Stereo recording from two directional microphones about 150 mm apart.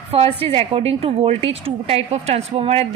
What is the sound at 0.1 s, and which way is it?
A woman's voice, 40° right (ahead or behind).